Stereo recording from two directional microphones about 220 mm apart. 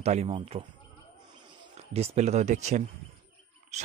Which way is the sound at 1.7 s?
30° right (ahead or behind).